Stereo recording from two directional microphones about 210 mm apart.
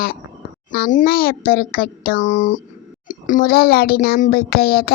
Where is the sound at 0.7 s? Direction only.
40° left (ahead or behind).